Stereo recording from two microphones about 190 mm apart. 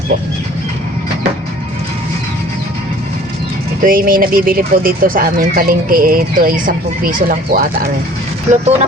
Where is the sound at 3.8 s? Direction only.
50° right (ahead or behind).